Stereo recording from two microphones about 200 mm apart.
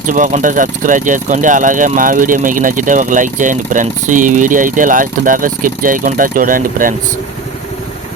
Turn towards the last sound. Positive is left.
turn(degrees=-45)  # may be behind; listen again after turning